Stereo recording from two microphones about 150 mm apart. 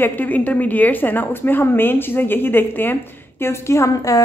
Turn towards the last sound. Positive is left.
turn(degrees=20)  # may be behind; listen again after turning